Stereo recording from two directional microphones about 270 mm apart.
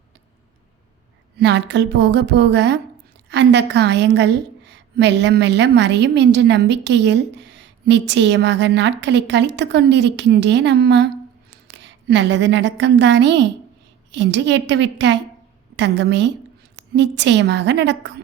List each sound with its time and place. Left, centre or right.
1.4 s a woman's voice: right